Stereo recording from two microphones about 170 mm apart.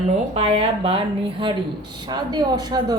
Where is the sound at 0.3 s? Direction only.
35° right (ahead or behind).